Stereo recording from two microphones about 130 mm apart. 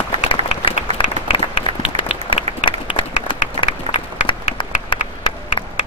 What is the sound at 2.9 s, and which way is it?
Run, 40° left (ahead or behind).